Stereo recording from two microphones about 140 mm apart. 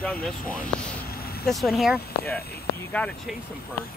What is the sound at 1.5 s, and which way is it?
Speech, centre (ahead or behind).